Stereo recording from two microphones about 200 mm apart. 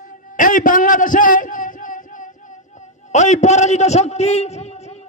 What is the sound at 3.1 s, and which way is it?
A man's voice, 35° left (ahead or behind).